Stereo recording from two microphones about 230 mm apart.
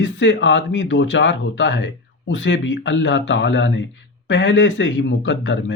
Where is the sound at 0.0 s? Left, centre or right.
Left.